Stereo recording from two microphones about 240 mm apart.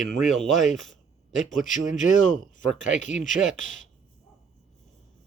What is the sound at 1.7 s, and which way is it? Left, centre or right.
Speech, left.